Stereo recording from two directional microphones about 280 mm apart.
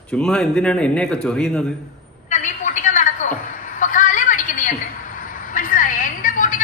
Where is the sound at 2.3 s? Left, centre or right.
Left.